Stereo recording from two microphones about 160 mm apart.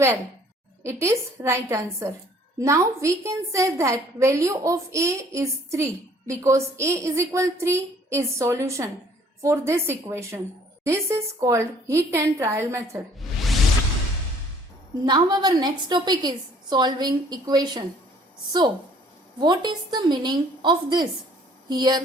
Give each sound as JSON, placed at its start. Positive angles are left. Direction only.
{"t": 0.8, "sound": "a woman's voice", "side_deg": -15}
{"t": 13.1, "sound": "music", "side_deg": 0}
{"t": 15.0, "sound": "a woman's voice", "side_deg": -25}
{"t": 19.4, "sound": "a woman's voice", "side_deg": -25}